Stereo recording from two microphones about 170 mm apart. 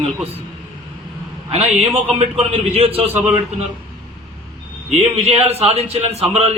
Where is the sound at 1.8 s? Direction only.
35° right (ahead or behind).